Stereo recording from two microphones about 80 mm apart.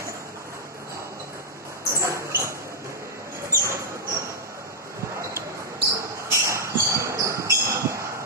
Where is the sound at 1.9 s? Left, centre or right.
Right.